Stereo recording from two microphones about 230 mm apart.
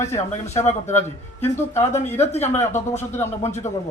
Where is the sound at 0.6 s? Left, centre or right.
Left.